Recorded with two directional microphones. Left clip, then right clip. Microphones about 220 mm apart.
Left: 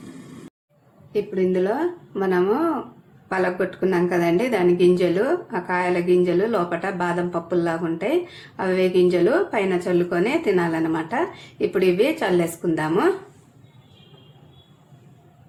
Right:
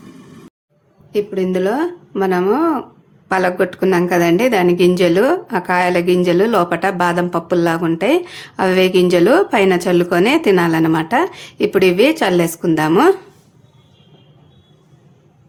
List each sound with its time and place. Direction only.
1.1 s a woman's voice: 40° right (ahead or behind)